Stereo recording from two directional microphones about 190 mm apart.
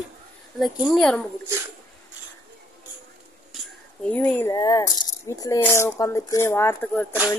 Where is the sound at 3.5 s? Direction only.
5° left (ahead or behind).